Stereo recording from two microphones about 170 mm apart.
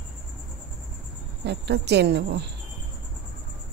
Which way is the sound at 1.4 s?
80° right.